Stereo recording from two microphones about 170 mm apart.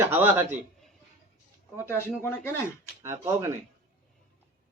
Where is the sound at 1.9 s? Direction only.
15° left (ahead or behind).